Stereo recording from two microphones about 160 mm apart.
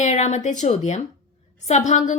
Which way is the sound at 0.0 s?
50° left (ahead or behind).